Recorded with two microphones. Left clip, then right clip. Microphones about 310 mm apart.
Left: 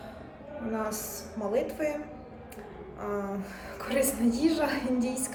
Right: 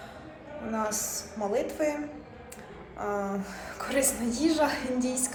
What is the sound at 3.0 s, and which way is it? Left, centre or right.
A woman's voice, centre.